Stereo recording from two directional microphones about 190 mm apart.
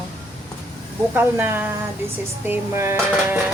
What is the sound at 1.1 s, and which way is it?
Speech, 10° right (ahead or behind).